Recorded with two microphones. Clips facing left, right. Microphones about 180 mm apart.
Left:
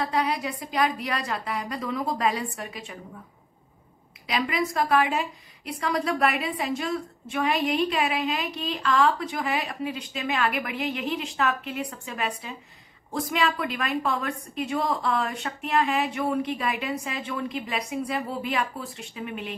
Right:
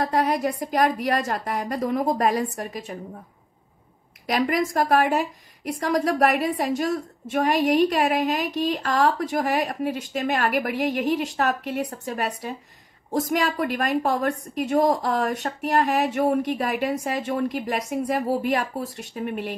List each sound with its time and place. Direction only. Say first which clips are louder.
0.0 s a woman's voice: right 4 dB; 45° right (ahead or behind)
4.3 s a woman's voice: right 4 dB; 45° right (ahead or behind)